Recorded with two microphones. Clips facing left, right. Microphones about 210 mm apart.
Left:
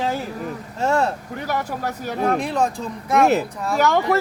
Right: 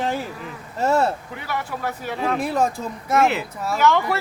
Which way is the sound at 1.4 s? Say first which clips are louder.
Left 2 dB; 40° left (ahead or behind).